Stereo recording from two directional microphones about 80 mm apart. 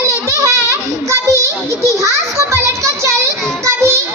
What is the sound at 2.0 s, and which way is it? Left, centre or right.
Children playing, right.